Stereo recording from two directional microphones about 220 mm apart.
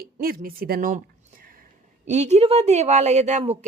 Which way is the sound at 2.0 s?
30° right (ahead or behind).